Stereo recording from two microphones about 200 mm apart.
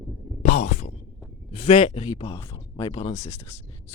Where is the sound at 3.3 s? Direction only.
10° left (ahead or behind).